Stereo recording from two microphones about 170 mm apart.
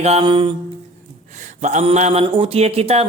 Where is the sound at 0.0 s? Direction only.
35° right (ahead or behind).